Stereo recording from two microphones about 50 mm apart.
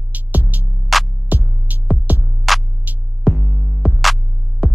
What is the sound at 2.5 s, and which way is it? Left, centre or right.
Music, centre.